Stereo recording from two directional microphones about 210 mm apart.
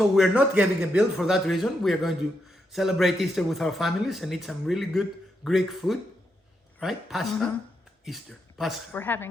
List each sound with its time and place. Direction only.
0.2 s speech: 5° right (ahead or behind); by 9.3 s 10° left (ahead or behind)